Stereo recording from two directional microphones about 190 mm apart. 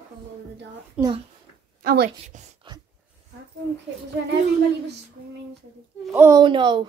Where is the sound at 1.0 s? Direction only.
5° right (ahead or behind).